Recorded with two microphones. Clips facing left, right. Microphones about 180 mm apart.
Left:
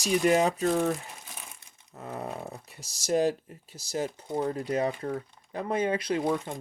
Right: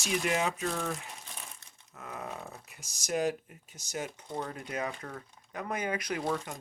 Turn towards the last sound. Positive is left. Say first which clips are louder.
# left 5 dB
turn(degrees=20)  # may be behind; listen again after turning